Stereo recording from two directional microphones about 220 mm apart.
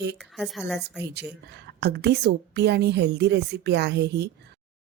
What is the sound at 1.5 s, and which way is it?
A woman's voice, 50° right (ahead or behind).